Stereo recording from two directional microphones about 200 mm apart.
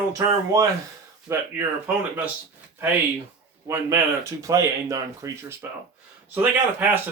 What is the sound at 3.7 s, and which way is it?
Speech, 15° right (ahead or behind).